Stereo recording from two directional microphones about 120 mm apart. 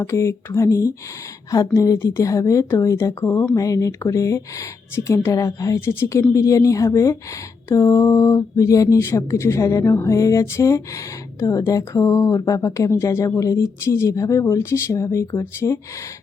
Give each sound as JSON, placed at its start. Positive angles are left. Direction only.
{"t": 0.0, "sound": "speech", "side_deg": 20}